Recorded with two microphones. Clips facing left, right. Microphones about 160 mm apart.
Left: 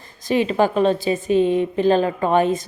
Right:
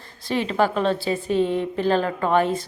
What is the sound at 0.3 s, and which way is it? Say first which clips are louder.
A woman's voice: left 4 dB; 15° left (ahead or behind).